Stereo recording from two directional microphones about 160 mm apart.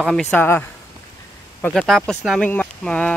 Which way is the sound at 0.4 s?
10° left (ahead or behind).